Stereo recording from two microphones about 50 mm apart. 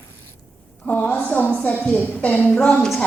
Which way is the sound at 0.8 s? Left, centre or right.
Left.